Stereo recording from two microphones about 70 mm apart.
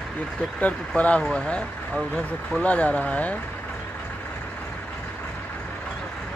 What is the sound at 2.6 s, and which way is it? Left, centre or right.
Speech, centre.